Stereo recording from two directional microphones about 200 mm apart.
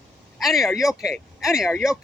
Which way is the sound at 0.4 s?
Centre (ahead or behind).